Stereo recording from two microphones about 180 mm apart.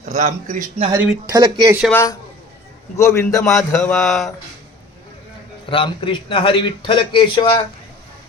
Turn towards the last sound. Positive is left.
turn(degrees=30)  # may be behind; listen again after turning